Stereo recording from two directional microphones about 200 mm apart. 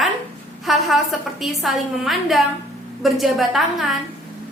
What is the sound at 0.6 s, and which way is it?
A woman's voice, centre (ahead or behind).